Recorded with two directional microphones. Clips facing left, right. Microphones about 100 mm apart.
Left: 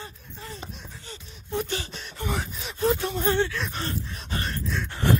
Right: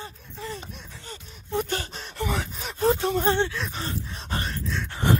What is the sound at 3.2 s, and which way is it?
Speech, 25° right (ahead or behind).